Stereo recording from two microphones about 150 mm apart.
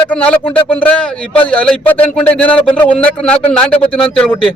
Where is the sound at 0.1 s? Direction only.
10° left (ahead or behind).